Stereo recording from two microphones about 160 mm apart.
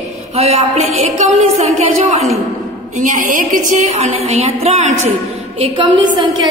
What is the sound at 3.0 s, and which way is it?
A woman's voice, 55° right (ahead or behind).